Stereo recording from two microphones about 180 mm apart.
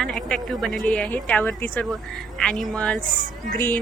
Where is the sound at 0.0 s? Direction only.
5° left (ahead or behind).